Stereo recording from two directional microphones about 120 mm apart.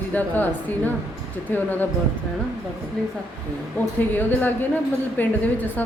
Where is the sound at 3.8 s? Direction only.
15° left (ahead or behind).